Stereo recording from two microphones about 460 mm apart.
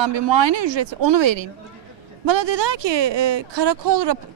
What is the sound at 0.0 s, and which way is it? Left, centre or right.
A woman's voice, right.